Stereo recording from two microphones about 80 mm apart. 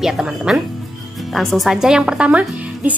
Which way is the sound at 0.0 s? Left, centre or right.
Centre.